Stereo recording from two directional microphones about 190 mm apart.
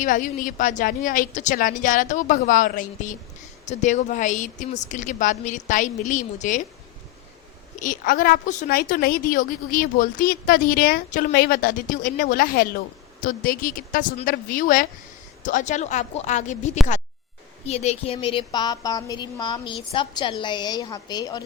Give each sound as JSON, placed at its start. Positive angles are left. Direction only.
{"t": 0.0, "sound": "a woman's voice", "side_deg": 45}
{"t": 7.8, "sound": "a woman's voice", "side_deg": 45}